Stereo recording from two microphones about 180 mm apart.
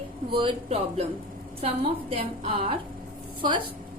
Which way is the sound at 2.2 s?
30° right (ahead or behind).